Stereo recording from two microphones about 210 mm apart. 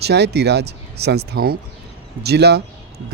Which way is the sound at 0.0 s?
55° right (ahead or behind).